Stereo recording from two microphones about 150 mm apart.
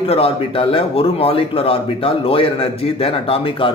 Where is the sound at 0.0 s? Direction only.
40° left (ahead or behind).